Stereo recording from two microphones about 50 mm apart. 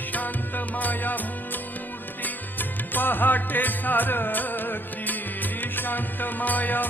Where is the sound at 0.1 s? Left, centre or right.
Left.